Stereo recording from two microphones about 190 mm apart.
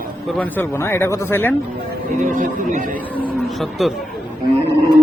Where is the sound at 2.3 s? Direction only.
40° right (ahead or behind).